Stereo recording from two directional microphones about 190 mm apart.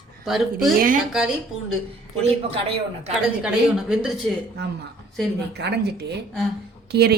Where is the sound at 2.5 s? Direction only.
30° right (ahead or behind).